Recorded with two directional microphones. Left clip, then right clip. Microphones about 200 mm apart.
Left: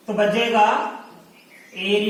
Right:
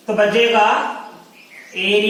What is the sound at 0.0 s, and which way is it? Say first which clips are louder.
Speech: right 5 dB; 15° right (ahead or behind).